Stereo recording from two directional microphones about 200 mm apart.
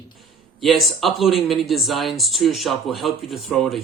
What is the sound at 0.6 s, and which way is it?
Speech, centre (ahead or behind).